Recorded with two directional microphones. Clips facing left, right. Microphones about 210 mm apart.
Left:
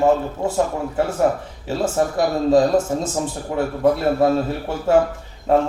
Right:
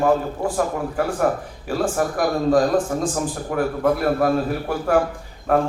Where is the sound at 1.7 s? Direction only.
25° left (ahead or behind).